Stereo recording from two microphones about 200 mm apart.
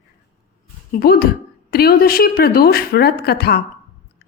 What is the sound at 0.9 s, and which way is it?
A woman's voice, 50° left (ahead or behind).